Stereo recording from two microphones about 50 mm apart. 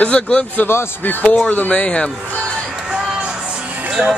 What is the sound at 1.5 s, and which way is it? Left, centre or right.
Speech, left.